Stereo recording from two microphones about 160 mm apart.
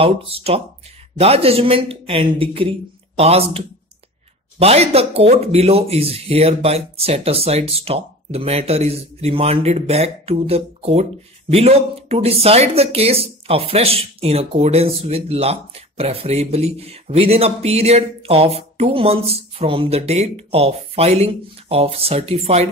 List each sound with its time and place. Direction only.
0.0 s speech: 35° right (ahead or behind)